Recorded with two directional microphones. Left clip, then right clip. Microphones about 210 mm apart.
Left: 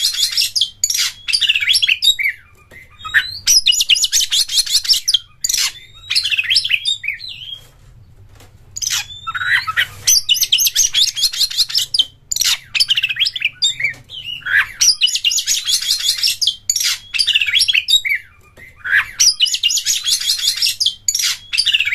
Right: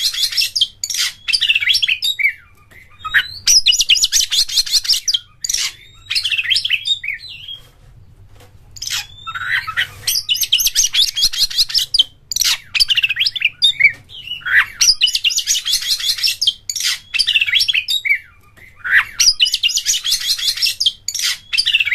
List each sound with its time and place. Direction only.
0.0 s bird: 10° left (ahead or behind)
3.1 s bird: 15° right (ahead or behind)
3.5 s chirp: 5° right (ahead or behind)
5.6 s bird: 20° left (ahead or behind)
8.7 s bird: 20° left (ahead or behind)
10.7 s chirp: 5° right (ahead or behind)
14.4 s bird: 15° right (ahead or behind)
15.3 s bird: 5° left (ahead or behind)
18.9 s bird: 15° right (ahead or behind)
19.8 s bird: 10° left (ahead or behind)